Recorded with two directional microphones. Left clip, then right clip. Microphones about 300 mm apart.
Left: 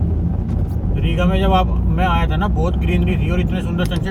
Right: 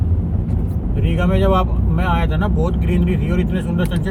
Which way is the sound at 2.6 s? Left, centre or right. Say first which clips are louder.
Even; left.